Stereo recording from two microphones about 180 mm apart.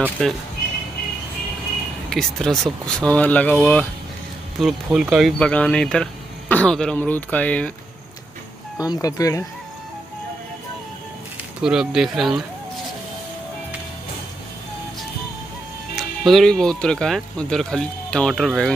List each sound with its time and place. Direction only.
0.2 s speech: 5° left (ahead or behind)
2.0 s speech: centre (ahead or behind)
4.6 s speech: centre (ahead or behind)
5.4 s speech: 5° left (ahead or behind)
8.7 s speech: 20° left (ahead or behind)
11.6 s speech: 5° right (ahead or behind)
16.0 s speech: centre (ahead or behind)